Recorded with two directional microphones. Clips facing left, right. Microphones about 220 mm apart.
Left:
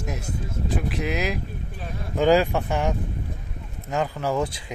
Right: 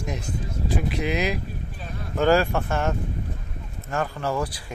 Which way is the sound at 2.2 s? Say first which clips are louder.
Left 1 dB; 15° left (ahead or behind).